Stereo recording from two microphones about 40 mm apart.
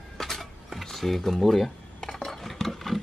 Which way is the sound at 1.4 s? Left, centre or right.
Centre.